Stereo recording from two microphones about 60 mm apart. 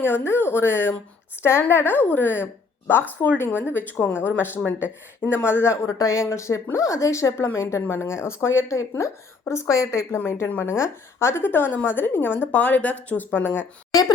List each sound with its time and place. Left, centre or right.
0.0 s a woman's voice: left
5.5 s a woman's voice: left
6.0 s speech: left
6.3 s a woman's voice: left
10.2 s a woman's voice: left